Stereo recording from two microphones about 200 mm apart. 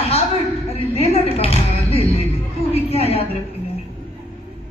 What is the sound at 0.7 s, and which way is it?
Music, 30° left (ahead or behind).